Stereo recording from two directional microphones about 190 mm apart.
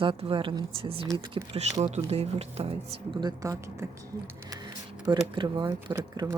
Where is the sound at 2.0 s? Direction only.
35° right (ahead or behind).